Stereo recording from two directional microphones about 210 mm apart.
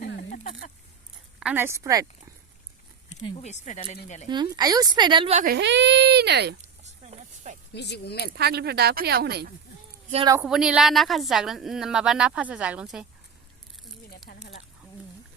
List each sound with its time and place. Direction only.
0.0 s a sound: 45° left (ahead or behind)
1.4 s a woman's voice: 5° right (ahead or behind)
3.1 s speech: 35° left (ahead or behind)
4.3 s speech: 20° right (ahead or behind)
5.5 s speech: 55° right (ahead or behind)
6.8 s a sound: 30° right (ahead or behind)
7.7 s speech: 55° left (ahead or behind)
8.4 s speech: 50° right (ahead or behind)
10.4 s a woman's voice: 5° right (ahead or behind)
14.3 s a sound: 45° left (ahead or behind)